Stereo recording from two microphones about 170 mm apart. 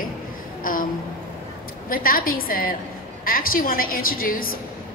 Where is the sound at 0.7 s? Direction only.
55° left (ahead or behind).